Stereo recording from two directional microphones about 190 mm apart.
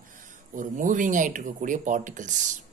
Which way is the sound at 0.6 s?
45° right (ahead or behind).